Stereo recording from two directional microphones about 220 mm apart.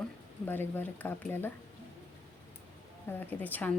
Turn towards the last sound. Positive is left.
turn(degrees=10)  # may be behind; listen again after turning